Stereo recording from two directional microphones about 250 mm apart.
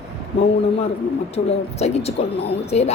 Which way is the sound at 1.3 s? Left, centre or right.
Left.